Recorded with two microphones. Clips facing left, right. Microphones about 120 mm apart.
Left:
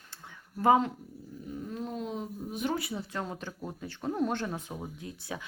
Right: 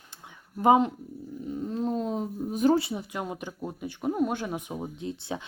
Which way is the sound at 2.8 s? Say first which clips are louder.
Right 5 dB; 20° right (ahead or behind).